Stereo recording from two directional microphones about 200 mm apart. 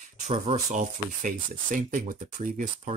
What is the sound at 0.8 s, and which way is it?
Speech, 40° right (ahead or behind).